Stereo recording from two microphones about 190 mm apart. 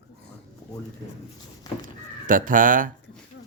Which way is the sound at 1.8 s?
45° right (ahead or behind).